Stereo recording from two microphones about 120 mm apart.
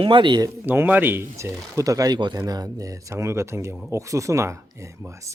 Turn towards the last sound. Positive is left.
turn(degrees=-25)  # may be behind; listen again after turning